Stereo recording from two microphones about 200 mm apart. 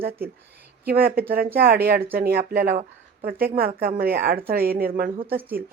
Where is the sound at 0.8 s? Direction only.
50° right (ahead or behind).